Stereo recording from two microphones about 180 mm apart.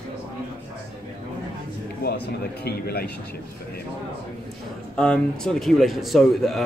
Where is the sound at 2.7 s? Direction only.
60° left (ahead or behind).